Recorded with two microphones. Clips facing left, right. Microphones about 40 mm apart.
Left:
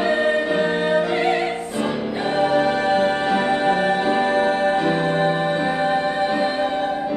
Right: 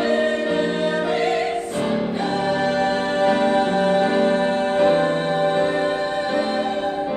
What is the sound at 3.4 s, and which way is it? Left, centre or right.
Music, centre.